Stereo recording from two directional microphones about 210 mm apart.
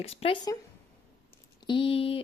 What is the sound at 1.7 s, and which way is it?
Speech, 25° left (ahead or behind).